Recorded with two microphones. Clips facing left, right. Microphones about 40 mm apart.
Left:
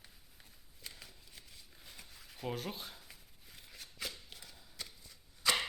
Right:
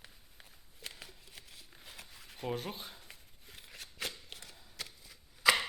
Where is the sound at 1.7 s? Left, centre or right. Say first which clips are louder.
Right 4 dB; centre.